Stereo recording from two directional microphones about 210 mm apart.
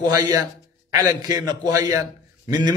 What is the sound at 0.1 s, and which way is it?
A man's voice, 15° right (ahead or behind).